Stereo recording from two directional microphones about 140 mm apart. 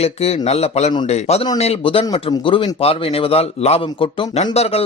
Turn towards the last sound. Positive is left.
turn(degrees=45)  # may be behind; listen again after turning